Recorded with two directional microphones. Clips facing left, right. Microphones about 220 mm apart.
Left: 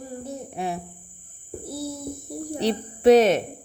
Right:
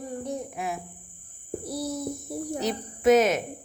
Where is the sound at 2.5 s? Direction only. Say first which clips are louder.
Left 6 dB; 30° left (ahead or behind).